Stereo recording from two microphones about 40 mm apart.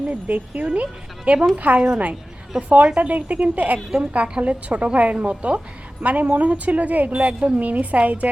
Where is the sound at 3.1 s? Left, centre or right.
Right.